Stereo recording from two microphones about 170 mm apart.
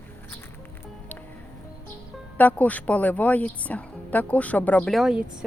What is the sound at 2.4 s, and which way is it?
A woman's voice, 10° left (ahead or behind).